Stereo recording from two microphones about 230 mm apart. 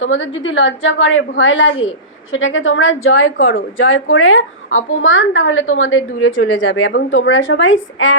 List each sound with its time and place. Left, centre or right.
0.0 s a woman's voice: left